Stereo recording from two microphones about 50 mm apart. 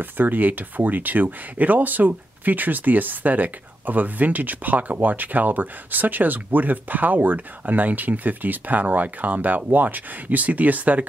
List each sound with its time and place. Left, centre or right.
0.0 s speech: right